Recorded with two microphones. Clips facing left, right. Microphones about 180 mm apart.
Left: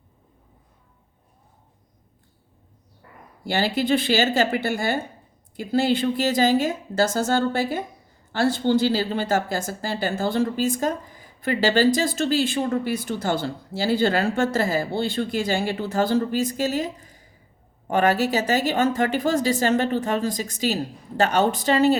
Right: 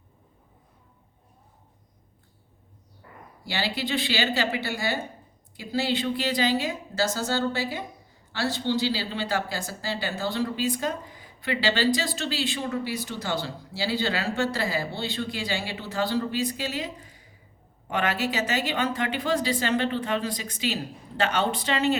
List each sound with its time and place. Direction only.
3.5 s speech: 50° left (ahead or behind)